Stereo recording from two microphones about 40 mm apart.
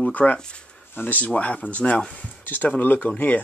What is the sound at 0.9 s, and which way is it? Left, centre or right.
Speech, left.